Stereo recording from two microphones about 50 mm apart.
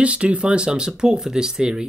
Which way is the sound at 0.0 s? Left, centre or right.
Right.